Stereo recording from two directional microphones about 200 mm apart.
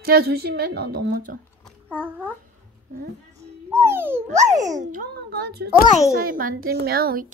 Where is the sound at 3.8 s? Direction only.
10° right (ahead or behind).